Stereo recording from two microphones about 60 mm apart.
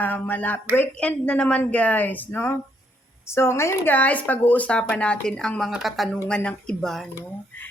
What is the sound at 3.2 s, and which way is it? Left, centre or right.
Speech, left.